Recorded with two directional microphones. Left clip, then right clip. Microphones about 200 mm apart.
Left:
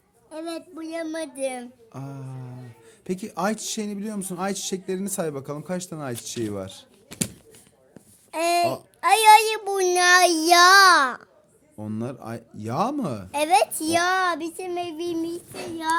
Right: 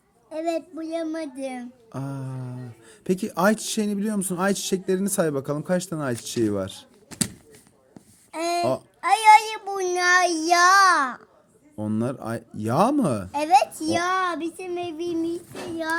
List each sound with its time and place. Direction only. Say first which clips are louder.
0.9 s speech: left 1 dB; 45° left (ahead or behind)
1.9 s speech: right 5 dB; 25° right (ahead or behind)
8.3 s speech: left 3 dB; 40° left (ahead or behind)
9.0 s child singing: left 1 dB; 40° left (ahead or behind)
11.8 s speech: right 5 dB; 20° right (ahead or behind)
13.3 s speech: even; 35° left (ahead or behind)